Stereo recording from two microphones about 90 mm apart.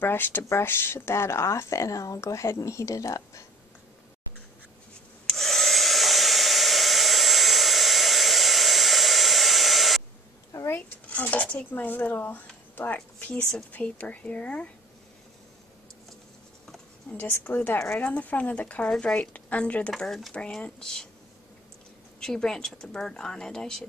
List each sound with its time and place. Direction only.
0.0 s speech: 25° left (ahead or behind)
5.2 s hair dryer: 5° left (ahead or behind)
10.5 s a sound: 30° left (ahead or behind)
11.1 s speech: 15° left (ahead or behind)
17.2 s speech: 25° left (ahead or behind)
20.0 s speech: 5° left (ahead or behind)
22.2 s speech: 5° left (ahead or behind)